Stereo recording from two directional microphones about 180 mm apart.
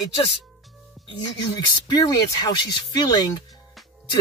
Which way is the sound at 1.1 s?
25° left (ahead or behind).